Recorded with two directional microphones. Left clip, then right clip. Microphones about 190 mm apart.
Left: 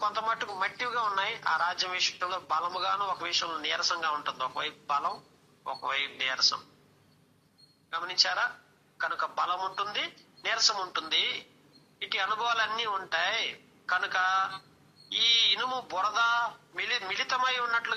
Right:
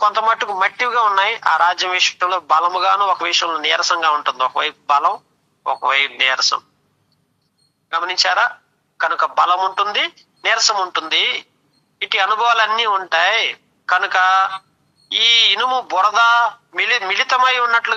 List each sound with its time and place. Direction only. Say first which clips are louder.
0.0 s speech: right 14 dB; 45° right (ahead or behind)
7.9 s speech: right 12 dB; 45° right (ahead or behind)